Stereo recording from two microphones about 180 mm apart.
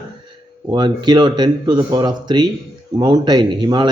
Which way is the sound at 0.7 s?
25° right (ahead or behind).